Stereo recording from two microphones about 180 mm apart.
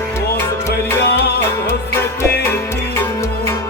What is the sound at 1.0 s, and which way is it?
Music, 65° left (ahead or behind).